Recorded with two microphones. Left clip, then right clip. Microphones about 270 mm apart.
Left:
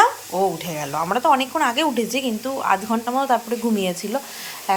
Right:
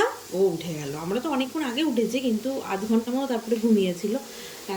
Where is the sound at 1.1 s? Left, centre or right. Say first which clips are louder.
Left 10 dB; centre.